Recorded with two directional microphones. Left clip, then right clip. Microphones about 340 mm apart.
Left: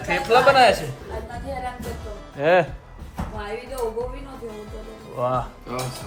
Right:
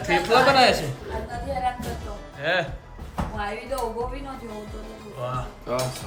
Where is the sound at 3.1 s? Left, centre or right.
Centre.